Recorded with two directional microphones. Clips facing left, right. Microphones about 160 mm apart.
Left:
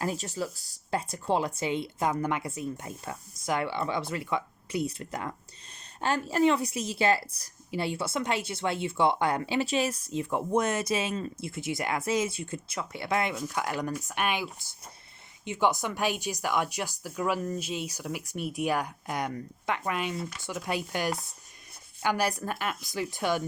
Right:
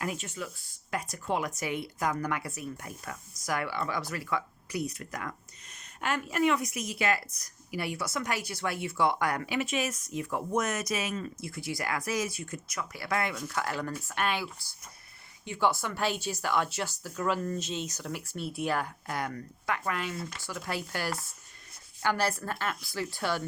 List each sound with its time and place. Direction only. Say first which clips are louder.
0.0 s a woman's voice: left 4 dB; 35° left (ahead or behind); by 23.4 s 15° left (ahead or behind)